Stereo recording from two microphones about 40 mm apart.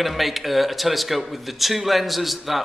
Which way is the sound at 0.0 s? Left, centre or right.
Centre.